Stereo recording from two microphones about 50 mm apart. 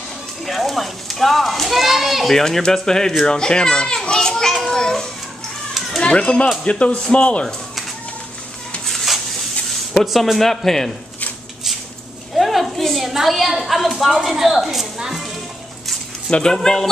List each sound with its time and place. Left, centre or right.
0.5 s speech: centre
3.3 s children playing: centre
4.7 s a sound: centre
5.9 s speech: centre
8.8 s a sound: centre
9.7 s speech: centre
12.4 s a sound: centre
14.1 s a woman's voice: centre
16.3 s speech: centre
16.5 s speech: centre